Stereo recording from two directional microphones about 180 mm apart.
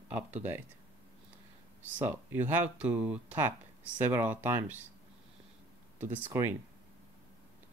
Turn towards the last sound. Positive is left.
turn(degrees=-15)  # may be behind; listen again after turning